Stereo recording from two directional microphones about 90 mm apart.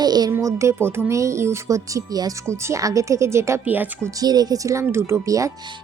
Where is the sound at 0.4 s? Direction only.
35° right (ahead or behind).